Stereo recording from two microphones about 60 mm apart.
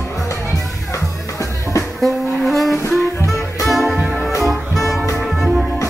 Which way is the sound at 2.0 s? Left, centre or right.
Centre.